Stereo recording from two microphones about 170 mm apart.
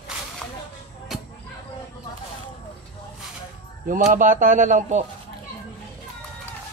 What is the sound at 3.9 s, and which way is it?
A man's voice, 50° right (ahead or behind).